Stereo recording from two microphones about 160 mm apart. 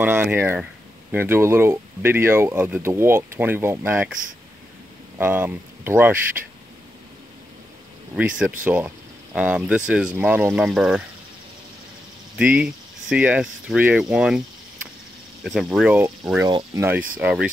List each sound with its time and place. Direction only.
0.0 s speech: 10° right (ahead or behind)
5.1 s speech: 10° right (ahead or behind)
8.6 s speech: 10° right (ahead or behind)
12.4 s speech: 5° right (ahead or behind)
15.4 s speech: centre (ahead or behind)
16.3 s speech: 20° right (ahead or behind)
17.2 s speech: 5° right (ahead or behind)